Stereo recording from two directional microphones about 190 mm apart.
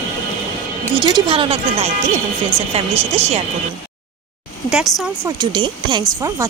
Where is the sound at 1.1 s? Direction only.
30° right (ahead or behind).